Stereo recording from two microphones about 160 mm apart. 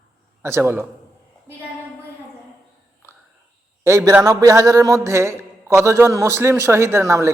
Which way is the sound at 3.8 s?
15° right (ahead or behind).